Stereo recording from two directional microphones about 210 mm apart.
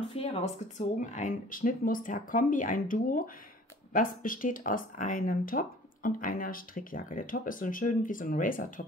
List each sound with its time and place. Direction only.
0.1 s speech: 30° left (ahead or behind)